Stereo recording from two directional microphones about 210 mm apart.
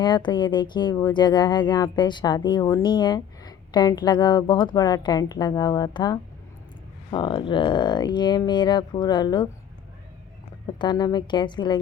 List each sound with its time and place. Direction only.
0.0 s speech: 20° left (ahead or behind)
10.8 s speech: 20° left (ahead or behind)